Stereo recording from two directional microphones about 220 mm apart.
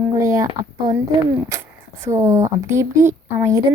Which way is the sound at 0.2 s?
15° right (ahead or behind).